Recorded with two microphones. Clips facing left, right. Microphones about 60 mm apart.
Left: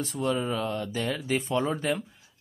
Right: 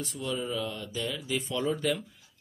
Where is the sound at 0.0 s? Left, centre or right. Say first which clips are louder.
Left 5 dB; left.